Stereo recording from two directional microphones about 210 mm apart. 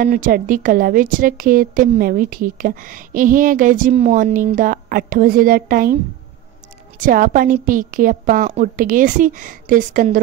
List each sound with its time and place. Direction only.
0.0 s a woman's voice: 40° right (ahead or behind)
7.0 s a woman's voice: 40° right (ahead or behind)